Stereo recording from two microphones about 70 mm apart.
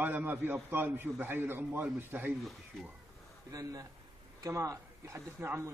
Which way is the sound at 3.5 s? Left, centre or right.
Right.